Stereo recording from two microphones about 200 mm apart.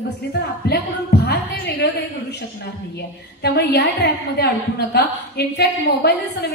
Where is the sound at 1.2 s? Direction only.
55° left (ahead or behind).